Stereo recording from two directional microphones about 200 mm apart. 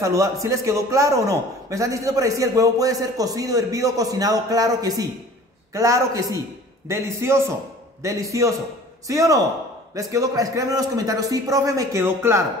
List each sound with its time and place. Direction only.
0.0 s a man's voice: 15° right (ahead or behind)